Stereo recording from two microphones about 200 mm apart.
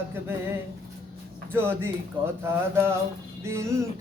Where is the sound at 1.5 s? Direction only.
10° right (ahead or behind).